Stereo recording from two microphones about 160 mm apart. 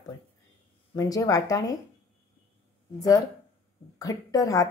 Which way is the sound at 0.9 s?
20° left (ahead or behind).